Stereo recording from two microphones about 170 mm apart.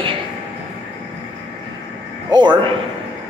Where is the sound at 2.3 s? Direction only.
25° right (ahead or behind).